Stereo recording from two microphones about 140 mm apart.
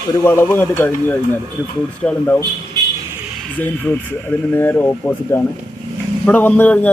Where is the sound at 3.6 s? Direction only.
15° left (ahead or behind).